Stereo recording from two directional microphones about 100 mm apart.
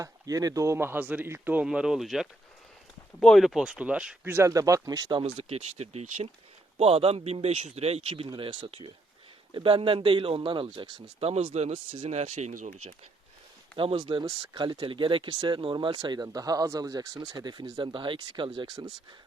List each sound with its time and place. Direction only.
0.0 s speech: 35° right (ahead or behind); by 1.6 s 20° right (ahead or behind)
1.6 s speech: 5° right (ahead or behind)
4.3 s speech: 25° right (ahead or behind); by 5.2 s 40° right (ahead or behind)
5.2 s speech: 85° right; by 8.9 s 70° right (ahead or behind)
9.5 s speech: 55° right (ahead or behind)
11.2 s speech: 90° right
13.7 s speech: 60° right (ahead or behind)